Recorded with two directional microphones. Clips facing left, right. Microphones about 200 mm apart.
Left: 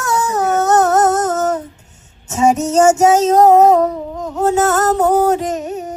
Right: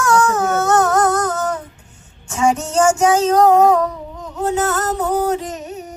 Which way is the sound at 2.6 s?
40° left (ahead or behind).